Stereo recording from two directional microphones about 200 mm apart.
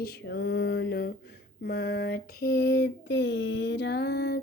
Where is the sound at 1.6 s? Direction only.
50° left (ahead or behind).